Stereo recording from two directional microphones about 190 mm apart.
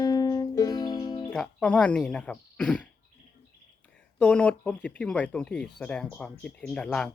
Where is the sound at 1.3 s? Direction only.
5° left (ahead or behind).